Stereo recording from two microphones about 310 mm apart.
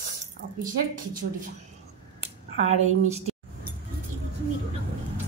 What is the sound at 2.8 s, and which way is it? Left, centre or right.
Speech, right.